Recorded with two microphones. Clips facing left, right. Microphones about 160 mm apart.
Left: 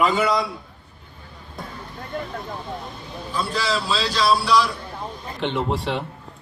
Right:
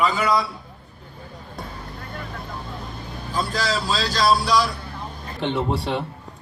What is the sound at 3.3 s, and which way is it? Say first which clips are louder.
A man's voice: even; 40° right (ahead or behind).